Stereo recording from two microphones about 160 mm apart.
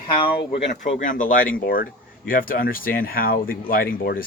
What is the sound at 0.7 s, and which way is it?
Speech, 55° left (ahead or behind).